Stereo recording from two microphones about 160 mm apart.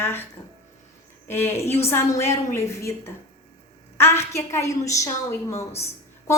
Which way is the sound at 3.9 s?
15° left (ahead or behind).